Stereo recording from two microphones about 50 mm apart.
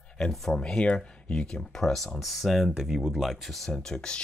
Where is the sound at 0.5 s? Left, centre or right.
Centre.